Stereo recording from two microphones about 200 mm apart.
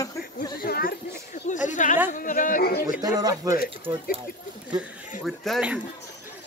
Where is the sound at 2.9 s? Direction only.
20° right (ahead or behind).